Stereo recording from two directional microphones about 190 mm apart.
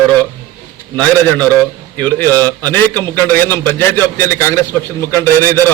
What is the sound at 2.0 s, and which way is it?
A man's voice, 10° left (ahead or behind).